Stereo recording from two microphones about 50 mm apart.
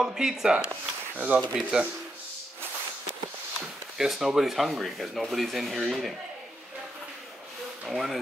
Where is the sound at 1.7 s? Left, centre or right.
Centre.